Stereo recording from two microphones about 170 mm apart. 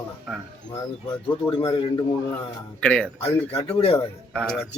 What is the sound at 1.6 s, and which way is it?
Speech, 25° left (ahead or behind).